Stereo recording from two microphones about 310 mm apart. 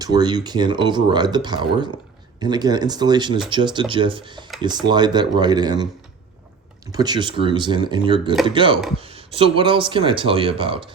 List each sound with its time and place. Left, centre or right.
0.0 s speech: centre
6.9 s speech: centre